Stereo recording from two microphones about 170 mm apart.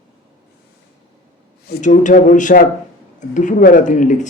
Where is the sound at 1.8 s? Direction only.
45° left (ahead or behind).